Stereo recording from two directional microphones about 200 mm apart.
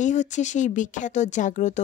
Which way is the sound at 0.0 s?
35° left (ahead or behind).